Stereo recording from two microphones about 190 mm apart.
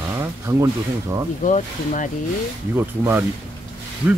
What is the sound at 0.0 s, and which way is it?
Speech, 15° right (ahead or behind).